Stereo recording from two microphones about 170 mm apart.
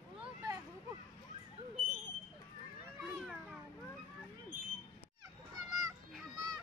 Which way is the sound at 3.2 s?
Centre (ahead or behind).